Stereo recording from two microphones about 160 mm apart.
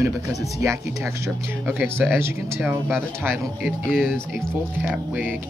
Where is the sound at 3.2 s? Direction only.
15° right (ahead or behind).